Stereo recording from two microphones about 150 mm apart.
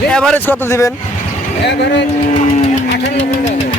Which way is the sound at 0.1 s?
5° left (ahead or behind).